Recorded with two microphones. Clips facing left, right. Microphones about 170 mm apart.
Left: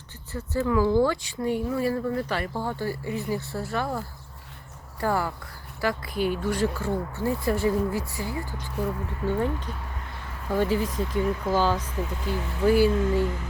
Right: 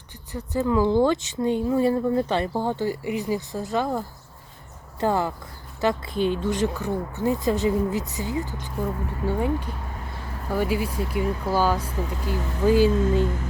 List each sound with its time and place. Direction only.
0.3 s speech: 15° right (ahead or behind)